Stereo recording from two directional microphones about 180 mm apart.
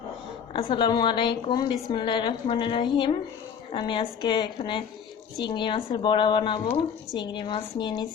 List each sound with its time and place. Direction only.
0.7 s a woman's voice: 25° left (ahead or behind)